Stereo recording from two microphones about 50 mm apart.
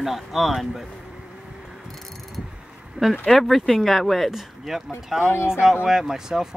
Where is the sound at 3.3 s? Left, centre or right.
Centre.